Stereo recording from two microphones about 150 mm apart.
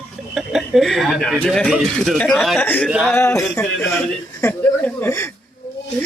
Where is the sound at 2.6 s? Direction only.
10° left (ahead or behind).